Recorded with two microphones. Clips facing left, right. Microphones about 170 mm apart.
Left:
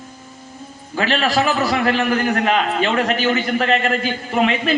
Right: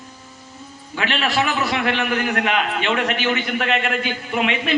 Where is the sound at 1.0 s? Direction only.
40° left (ahead or behind).